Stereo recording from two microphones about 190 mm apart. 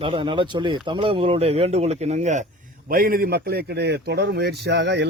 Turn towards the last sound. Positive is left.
turn(degrees=-65)  # may be behind; listen again after turning